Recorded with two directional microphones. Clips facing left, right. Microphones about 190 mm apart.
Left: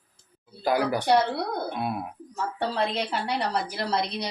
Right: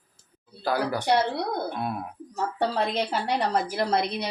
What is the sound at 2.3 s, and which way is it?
A woman's voice, 40° right (ahead or behind).